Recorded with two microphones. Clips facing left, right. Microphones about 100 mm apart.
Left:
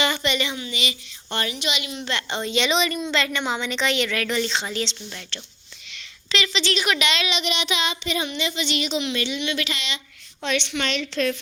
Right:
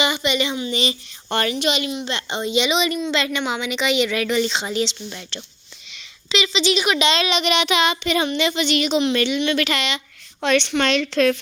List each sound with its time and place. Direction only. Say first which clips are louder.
0.0 s a woman's voice: right 3 dB; 15° right (ahead or behind)
0.7 s speech: right 6 dB; 35° right (ahead or behind)
1.3 s a woman's voice: right 6 dB; 60° right (ahead or behind)
2.0 s a woman's voice: right 2 dB; 20° right (ahead or behind)
7.3 s child singing: right 6 dB; 60° right (ahead or behind)
10.4 s a woman's voice: right 7 dB; 70° right (ahead or behind)